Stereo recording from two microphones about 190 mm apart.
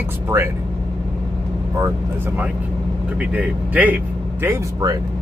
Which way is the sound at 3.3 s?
10° right (ahead or behind).